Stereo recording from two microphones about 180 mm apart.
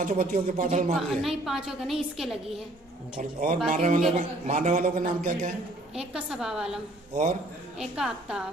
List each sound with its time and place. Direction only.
0.0 s a man's voice: 45° right (ahead or behind)
0.9 s a woman's voice: centre (ahead or behind)
3.2 s a man's voice: 50° right (ahead or behind)
5.9 s a woman's voice: 5° right (ahead or behind)
7.8 s a woman's voice: 5° right (ahead or behind)